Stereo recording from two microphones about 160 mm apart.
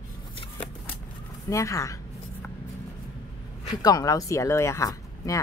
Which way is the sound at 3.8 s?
25° left (ahead or behind).